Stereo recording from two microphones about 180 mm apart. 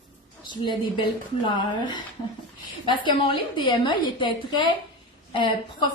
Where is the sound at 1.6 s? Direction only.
25° left (ahead or behind).